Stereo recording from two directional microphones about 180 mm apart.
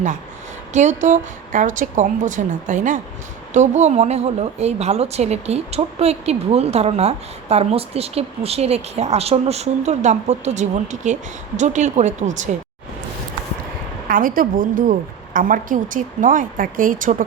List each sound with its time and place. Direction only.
0.7 s a woman's voice: 40° right (ahead or behind)
14.1 s a woman's voice: 50° right (ahead or behind)